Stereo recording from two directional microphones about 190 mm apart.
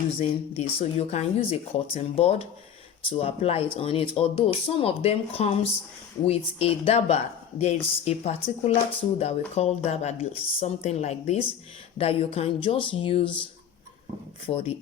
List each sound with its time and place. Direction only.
0.2 s speech: 30° left (ahead or behind)
14.4 s speech: 30° left (ahead or behind)